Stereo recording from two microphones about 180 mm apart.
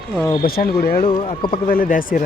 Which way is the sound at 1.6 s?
50° left (ahead or behind).